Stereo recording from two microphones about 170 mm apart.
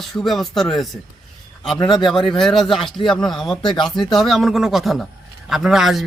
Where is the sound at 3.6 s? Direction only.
30° left (ahead or behind).